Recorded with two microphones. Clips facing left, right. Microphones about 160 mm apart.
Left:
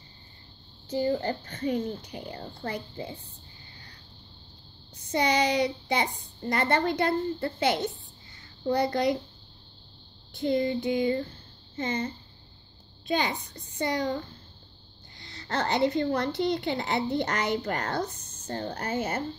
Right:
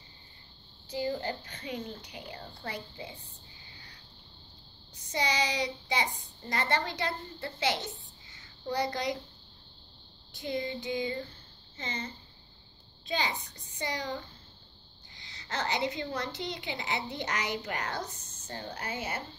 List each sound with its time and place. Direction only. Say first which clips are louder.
0.8 s a woman's voice: left 6 dB; 50° left (ahead or behind)
5.1 s a child's voice: left 7 dB; 55° left (ahead or behind)
10.3 s a child's voice: left 8 dB; 55° left (ahead or behind)
13.1 s a woman's voice: left 5 dB; 55° left (ahead or behind)
15.2 s a woman's voice: left 5 dB; 55° left (ahead or behind)